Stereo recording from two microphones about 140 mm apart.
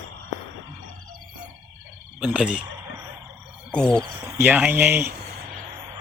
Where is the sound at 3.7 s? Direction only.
5° left (ahead or behind).